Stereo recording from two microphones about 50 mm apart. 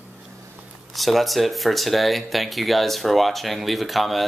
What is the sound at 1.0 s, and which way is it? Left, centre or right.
Speech, centre.